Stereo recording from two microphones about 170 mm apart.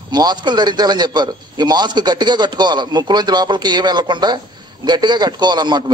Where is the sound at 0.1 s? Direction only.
25° right (ahead or behind).